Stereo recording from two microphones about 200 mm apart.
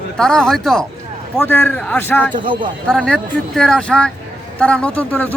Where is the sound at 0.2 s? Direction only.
5° left (ahead or behind).